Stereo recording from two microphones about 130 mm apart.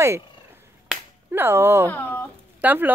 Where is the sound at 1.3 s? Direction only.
15° right (ahead or behind).